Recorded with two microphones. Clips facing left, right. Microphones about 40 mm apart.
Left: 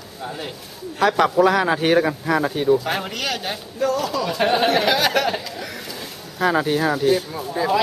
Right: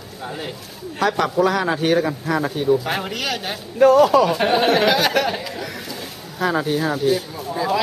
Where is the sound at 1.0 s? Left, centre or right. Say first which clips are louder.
Left 2 dB; centre.